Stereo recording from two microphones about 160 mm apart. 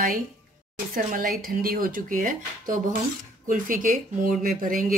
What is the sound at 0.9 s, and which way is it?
Speech, 60° right (ahead or behind).